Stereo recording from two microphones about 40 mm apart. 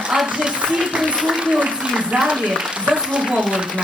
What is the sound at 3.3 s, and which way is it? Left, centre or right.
Speech, right.